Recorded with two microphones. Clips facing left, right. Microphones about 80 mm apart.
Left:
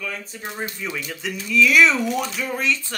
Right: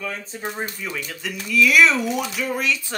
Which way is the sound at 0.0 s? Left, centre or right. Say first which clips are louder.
Right 2 dB; right.